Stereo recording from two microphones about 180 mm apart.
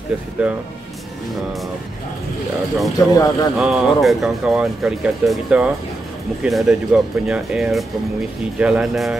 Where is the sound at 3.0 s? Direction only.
20° left (ahead or behind).